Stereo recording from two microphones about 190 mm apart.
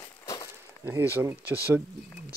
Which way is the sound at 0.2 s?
20° left (ahead or behind).